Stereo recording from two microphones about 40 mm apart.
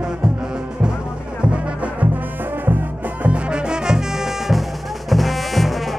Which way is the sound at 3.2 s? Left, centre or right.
Right.